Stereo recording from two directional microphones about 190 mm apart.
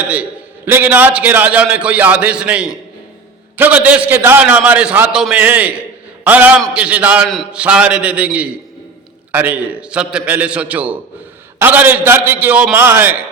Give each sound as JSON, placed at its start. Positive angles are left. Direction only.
{"t": 0.1, "sound": "a man's voice", "side_deg": -10}